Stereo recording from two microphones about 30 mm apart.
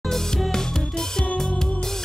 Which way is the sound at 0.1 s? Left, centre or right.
Centre.